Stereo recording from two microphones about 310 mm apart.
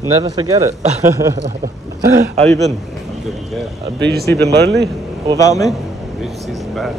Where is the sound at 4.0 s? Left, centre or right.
Right.